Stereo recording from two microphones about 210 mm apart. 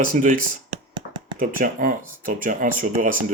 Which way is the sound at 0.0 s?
40° right (ahead or behind).